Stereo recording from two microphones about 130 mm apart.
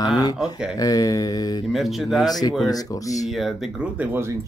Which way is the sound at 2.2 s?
30° left (ahead or behind).